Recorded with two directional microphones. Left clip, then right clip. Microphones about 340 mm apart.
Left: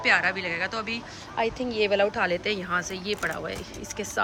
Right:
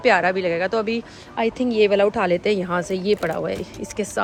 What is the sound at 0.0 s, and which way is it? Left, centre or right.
Speech, centre.